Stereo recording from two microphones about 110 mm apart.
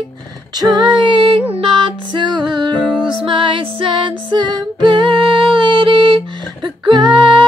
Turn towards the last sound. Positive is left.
turn(degrees=-45)  # may be behind; listen again after turning